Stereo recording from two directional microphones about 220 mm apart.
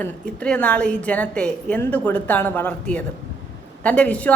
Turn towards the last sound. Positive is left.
turn(degrees=5)  # may be behind; listen again after turning